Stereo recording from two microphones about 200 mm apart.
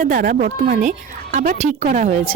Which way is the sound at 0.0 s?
40° right (ahead or behind).